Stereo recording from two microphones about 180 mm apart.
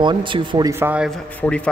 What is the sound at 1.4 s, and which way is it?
Speech, 5° left (ahead or behind).